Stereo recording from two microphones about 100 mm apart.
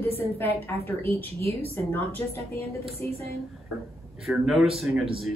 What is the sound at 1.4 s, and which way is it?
Speech, 85° right.